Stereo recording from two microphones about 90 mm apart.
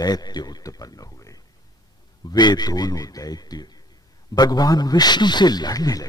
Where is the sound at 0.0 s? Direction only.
50° left (ahead or behind).